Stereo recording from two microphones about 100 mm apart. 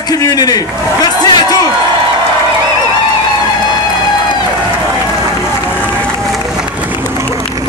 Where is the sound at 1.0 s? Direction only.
45° left (ahead or behind).